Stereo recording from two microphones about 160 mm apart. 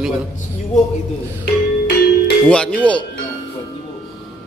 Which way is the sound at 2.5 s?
5° left (ahead or behind).